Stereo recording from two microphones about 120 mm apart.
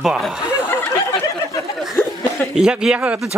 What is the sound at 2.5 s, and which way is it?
Speech, 5° right (ahead or behind).